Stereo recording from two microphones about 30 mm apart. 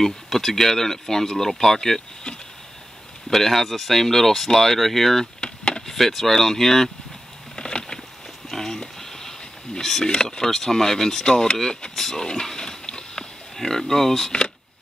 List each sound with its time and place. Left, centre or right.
0.4 s speech: centre
3.3 s speech: centre
5.4 s a sound: left
5.9 s speech: centre
7.5 s patter: left
8.5 s a sound: centre
9.8 s speech: centre
10.0 s speech: left
11.2 s speech: left
11.9 s speech: centre
12.3 s pig: left